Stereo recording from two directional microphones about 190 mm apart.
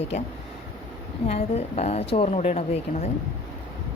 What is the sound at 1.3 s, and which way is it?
A woman's voice, 35° left (ahead or behind).